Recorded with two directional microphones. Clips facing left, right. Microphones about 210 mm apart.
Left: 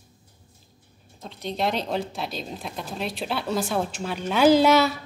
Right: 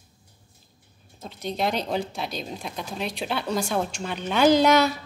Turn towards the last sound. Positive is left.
turn(degrees=5)  # may be behind; listen again after turning